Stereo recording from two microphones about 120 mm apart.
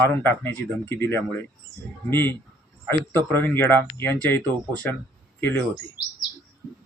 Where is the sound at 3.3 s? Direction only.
20° left (ahead or behind).